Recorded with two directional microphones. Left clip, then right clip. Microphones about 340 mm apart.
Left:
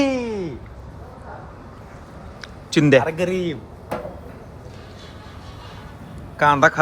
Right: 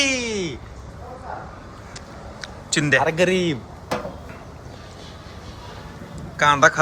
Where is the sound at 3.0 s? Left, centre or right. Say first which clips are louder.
Right 3 dB; right.